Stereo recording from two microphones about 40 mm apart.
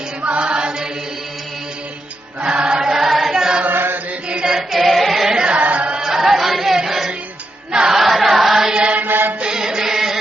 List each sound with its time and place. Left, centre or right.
0.3 s chant: right
2.4 s choir: right; by 3.3 s centre
3.3 s chant: centre
4.4 s choir: centre
5.5 s chant: right
6.0 s a sound: centre
6.7 s music: centre
7.9 s choir: centre
8.7 s mantra: right
9.0 s music: right
9.4 s music: centre